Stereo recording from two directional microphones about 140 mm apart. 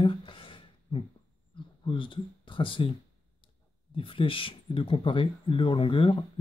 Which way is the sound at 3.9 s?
40° left (ahead or behind).